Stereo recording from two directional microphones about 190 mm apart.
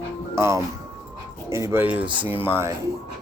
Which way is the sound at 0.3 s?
15° right (ahead or behind).